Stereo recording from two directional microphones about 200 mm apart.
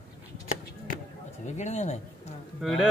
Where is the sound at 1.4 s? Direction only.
35° left (ahead or behind).